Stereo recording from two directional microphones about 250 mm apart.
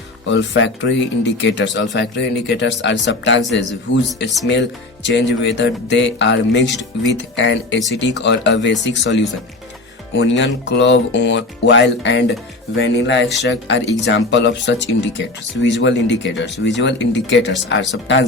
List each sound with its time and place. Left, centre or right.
0.3 s speech: left